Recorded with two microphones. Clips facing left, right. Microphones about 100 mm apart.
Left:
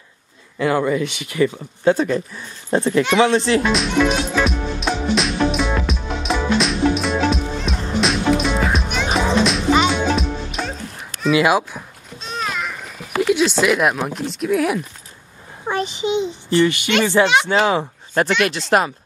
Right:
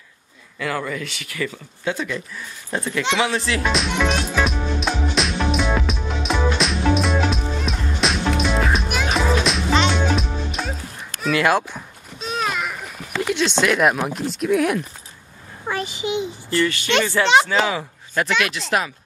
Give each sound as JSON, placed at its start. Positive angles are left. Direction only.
{"t": 0.6, "sound": "speech", "side_deg": 25}
{"t": 1.9, "sound": "speech", "side_deg": 40}
{"t": 3.6, "sound": "music", "side_deg": 0}
{"t": 11.1, "sound": "speech", "side_deg": 5}
{"t": 12.2, "sound": "a sound", "side_deg": -5}
{"t": 13.3, "sound": "speech", "side_deg": 5}
{"t": 15.6, "sound": "a child's voice", "side_deg": 25}
{"t": 17.5, "sound": "speech", "side_deg": 30}